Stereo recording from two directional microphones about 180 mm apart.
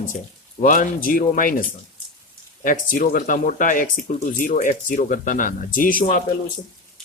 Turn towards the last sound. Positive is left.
turn(degrees=50)  # may be behind; listen again after turning